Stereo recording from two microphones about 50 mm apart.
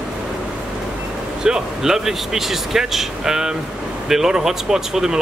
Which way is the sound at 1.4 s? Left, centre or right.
Centre.